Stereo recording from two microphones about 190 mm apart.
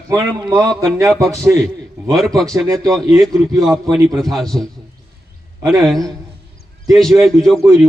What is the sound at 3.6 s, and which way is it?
A man's voice, centre (ahead or behind).